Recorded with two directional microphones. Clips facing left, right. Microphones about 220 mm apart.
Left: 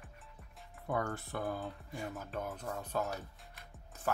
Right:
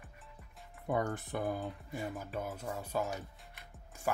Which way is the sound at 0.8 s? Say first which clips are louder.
Right 2 dB; 15° right (ahead or behind).